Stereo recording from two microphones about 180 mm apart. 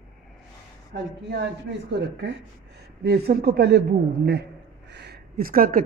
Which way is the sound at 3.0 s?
60° right (ahead or behind).